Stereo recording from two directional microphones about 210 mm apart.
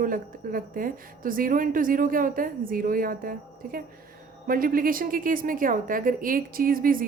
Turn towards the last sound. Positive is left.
turn(degrees=-40)  # may be behind; listen again after turning